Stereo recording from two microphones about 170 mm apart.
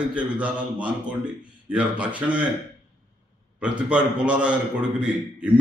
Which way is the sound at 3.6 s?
5° right (ahead or behind).